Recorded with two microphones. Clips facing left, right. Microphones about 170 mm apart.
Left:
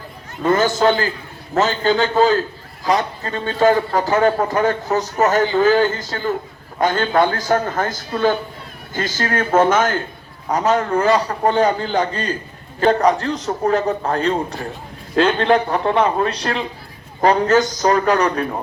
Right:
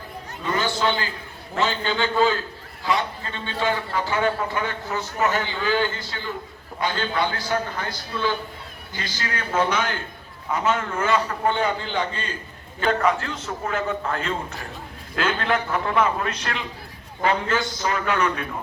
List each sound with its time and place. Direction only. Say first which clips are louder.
0.4 s a man's voice: left 8 dB; 45° left (ahead or behind)